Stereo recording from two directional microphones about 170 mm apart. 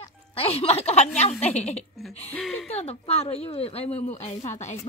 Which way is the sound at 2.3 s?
Centre (ahead or behind).